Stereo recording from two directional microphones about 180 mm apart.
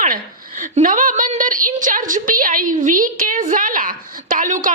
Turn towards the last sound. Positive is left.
turn(degrees=-45)  # may be behind; listen again after turning